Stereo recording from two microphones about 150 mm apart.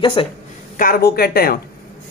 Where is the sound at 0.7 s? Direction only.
75° left (ahead or behind).